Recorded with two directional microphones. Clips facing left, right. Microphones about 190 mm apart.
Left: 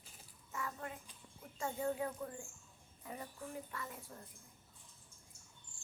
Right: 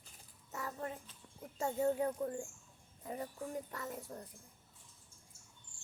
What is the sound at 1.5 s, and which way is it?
Speech, 25° right (ahead or behind).